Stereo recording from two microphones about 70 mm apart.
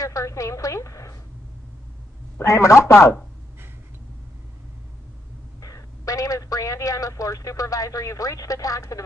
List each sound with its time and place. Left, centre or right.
0.0 s a woman's voice: left
2.4 s a woman's voice: left
5.6 s speech: left